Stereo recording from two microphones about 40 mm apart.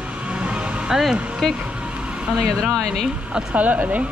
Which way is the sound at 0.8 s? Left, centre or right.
Centre.